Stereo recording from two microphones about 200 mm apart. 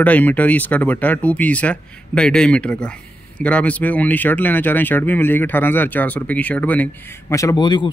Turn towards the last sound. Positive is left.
turn(degrees=20)  # may be behind; listen again after turning